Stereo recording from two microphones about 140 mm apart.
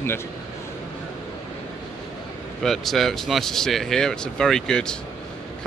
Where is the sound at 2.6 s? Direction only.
Centre (ahead or behind).